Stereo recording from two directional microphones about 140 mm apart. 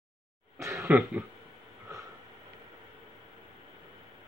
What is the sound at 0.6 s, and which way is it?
Cough, 20° right (ahead or behind).